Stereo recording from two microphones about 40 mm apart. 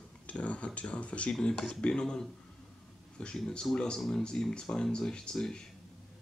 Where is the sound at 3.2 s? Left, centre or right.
Left.